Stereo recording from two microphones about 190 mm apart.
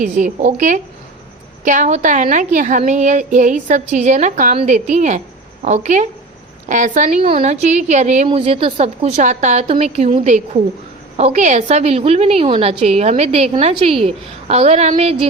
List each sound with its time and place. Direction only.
0.0 s a woman's voice: 40° right (ahead or behind)
8.3 s a woman's voice: 30° right (ahead or behind)